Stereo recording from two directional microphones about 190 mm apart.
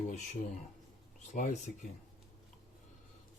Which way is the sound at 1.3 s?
45° left (ahead or behind).